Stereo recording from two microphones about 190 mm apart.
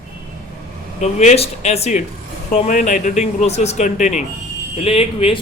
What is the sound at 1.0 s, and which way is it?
Speech, 35° left (ahead or behind).